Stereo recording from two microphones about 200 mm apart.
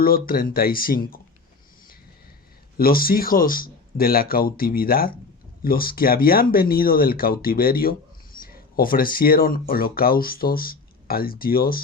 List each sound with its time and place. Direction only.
0.0 s speech: 45° left (ahead or behind)
2.7 s speech: 45° left (ahead or behind)